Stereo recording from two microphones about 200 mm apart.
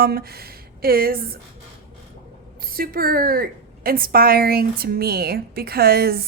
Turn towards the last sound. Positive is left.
turn(degrees=-50)  # may be behind; listen again after turning